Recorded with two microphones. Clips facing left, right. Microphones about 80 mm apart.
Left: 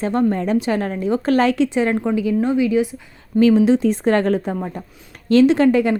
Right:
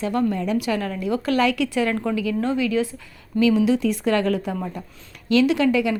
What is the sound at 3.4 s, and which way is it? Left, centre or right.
A woman's voice, left.